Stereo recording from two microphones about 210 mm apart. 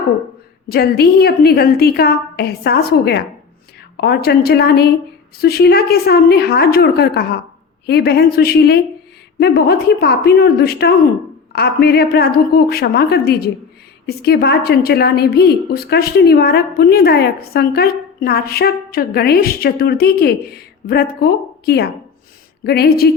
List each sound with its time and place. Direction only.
0.7 s a woman's voice: 50° left (ahead or behind)